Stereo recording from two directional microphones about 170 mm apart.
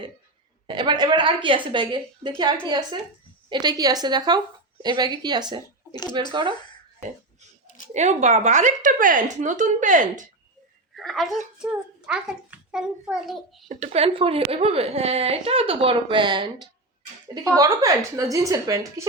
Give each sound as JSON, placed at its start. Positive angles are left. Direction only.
{"t": 0.7, "sound": "a woman's voice", "side_deg": -25}
{"t": 5.9, "sound": "speech", "side_deg": 25}
{"t": 7.9, "sound": "a woman's voice", "side_deg": -45}
{"t": 10.9, "sound": "a child's voice", "side_deg": 0}
{"t": 13.7, "sound": "a woman's voice", "side_deg": -45}